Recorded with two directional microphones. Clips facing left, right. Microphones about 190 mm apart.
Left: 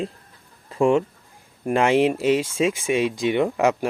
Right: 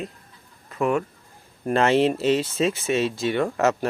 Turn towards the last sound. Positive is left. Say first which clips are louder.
# left 2 dB
turn(degrees=15)  # may be behind; listen again after turning